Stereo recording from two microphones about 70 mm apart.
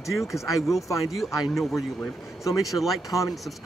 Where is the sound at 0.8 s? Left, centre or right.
Left.